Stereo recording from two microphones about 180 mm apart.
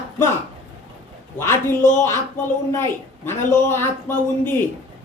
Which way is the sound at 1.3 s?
15° left (ahead or behind).